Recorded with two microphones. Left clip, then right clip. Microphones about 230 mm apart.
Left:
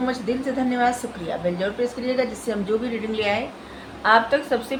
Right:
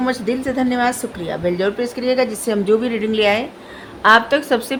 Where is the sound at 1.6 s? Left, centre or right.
Right.